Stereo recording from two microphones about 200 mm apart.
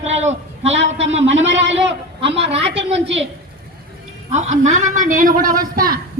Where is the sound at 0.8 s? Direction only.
70° right (ahead or behind).